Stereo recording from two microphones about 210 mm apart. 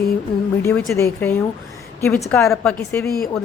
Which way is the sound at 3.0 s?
45° left (ahead or behind).